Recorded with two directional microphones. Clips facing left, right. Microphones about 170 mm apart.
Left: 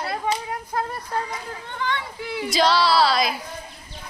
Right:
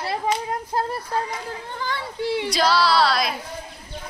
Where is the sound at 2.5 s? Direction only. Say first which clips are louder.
Left 2 dB; centre (ahead or behind).